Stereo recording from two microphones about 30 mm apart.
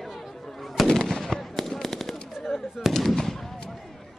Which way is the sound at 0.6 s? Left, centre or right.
Centre.